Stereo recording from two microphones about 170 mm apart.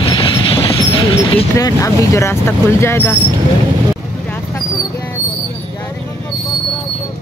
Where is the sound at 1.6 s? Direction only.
15° left (ahead or behind).